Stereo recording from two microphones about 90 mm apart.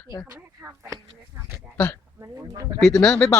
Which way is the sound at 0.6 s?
30° right (ahead or behind).